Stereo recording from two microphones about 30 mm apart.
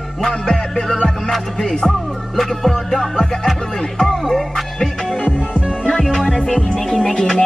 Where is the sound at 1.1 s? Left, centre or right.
Centre.